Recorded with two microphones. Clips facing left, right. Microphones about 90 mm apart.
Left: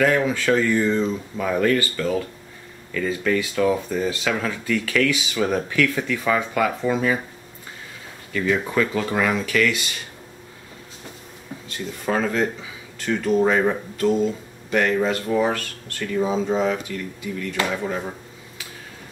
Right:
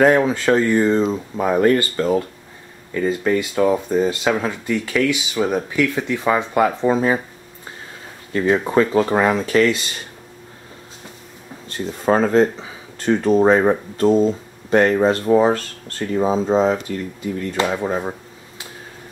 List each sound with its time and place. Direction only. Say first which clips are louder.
0.2 s speech: right 3 dB; 30° right (ahead or behind)
8.3 s speech: right 5 dB; 35° right (ahead or behind)
11.7 s speech: right 6 dB; 35° right (ahead or behind)